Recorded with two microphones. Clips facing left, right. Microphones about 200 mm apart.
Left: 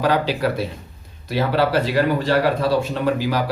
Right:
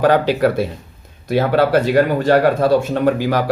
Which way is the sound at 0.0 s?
55° right (ahead or behind).